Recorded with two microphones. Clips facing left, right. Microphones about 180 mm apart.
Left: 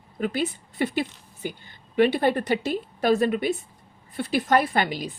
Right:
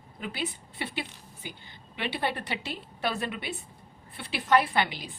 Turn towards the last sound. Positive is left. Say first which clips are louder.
# left 4 dB
turn(degrees=45)  # may be behind; listen again after turning